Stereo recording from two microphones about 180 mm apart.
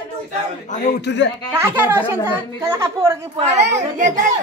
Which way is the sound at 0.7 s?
50° left (ahead or behind).